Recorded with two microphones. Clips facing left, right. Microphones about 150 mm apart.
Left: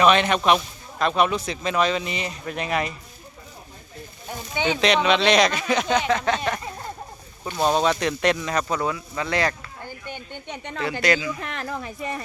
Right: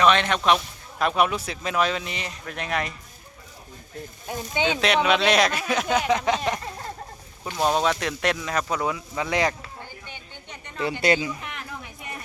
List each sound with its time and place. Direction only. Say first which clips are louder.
0.0 s speech: left 2 dB; 5° left (ahead or behind)
0.9 s speech: left 1 dB; 10° right (ahead or behind)
4.3 s speech: even; 15° right (ahead or behind)
7.6 s speech: left 2 dB; centre (ahead or behind)
10.1 s speech: left 7 dB; 60° left (ahead or behind)
11.0 s speech: right 1 dB; 30° right (ahead or behind)
11.3 s speech: left 6 dB; 90° left